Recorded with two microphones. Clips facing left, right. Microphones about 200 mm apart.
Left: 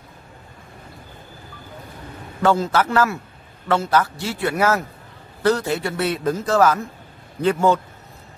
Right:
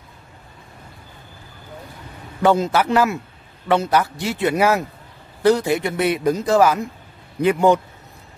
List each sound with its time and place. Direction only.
2.4 s a man's voice: 15° right (ahead or behind)